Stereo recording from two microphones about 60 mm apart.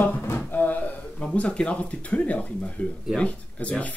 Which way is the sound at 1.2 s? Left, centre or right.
Centre.